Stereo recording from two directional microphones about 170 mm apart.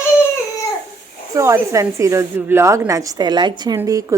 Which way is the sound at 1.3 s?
15° right (ahead or behind).